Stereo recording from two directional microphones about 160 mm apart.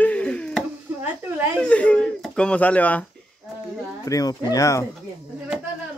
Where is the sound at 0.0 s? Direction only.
10° left (ahead or behind).